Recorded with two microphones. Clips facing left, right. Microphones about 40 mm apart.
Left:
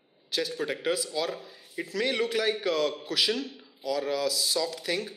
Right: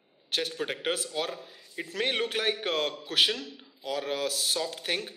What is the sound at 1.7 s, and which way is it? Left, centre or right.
A man's voice, right.